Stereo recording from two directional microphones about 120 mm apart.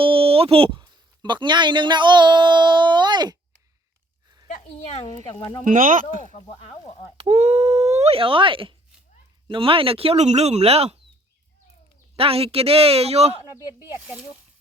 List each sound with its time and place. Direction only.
0.0 s a sound: 50° right (ahead or behind)
0.8 s speech: 35° right (ahead or behind)
4.4 s a sound: 70° left (ahead or behind)
6.3 s speech: 60° left (ahead or behind)
7.3 s speech: 70° right (ahead or behind)
12.1 s speech: 50° right (ahead or behind)
14.0 s speech: 10° right (ahead or behind)